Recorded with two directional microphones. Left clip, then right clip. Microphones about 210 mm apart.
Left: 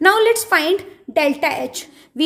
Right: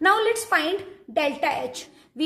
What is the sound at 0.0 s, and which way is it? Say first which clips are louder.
A woman's voice: left 6 dB; 40° left (ahead or behind).